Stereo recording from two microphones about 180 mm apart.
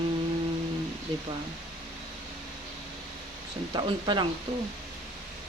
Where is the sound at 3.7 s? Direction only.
25° right (ahead or behind).